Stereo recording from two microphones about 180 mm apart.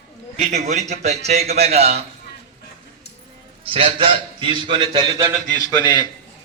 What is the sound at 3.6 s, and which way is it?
A man's voice, 30° right (ahead or behind).